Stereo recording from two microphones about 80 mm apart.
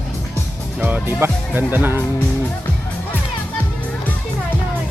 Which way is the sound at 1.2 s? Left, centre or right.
Right.